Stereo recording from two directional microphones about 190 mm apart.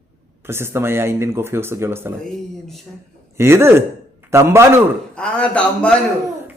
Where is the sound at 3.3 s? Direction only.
15° right (ahead or behind).